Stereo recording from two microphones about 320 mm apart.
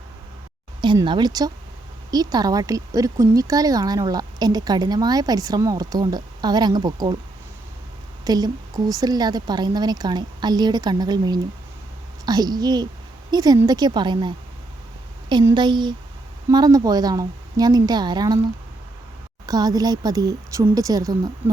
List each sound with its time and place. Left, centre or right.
0.8 s a woman's voice: centre
8.2 s a woman's voice: centre
19.5 s a woman's voice: centre